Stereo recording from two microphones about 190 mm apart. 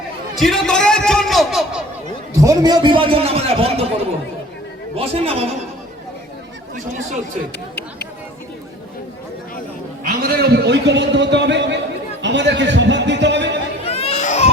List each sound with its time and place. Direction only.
0.3 s a man's voice: centre (ahead or behind)
2.3 s a man's voice: 15° right (ahead or behind)
4.9 s a man's voice: 30° right (ahead or behind)
10.0 s a man's voice: 50° right (ahead or behind); by 13.6 s 65° right (ahead or behind)
13.8 s baby cry: 30° left (ahead or behind)